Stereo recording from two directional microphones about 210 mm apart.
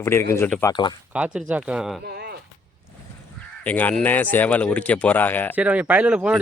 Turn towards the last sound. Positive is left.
turn(degrees=-5)  # may be behind; listen again after turning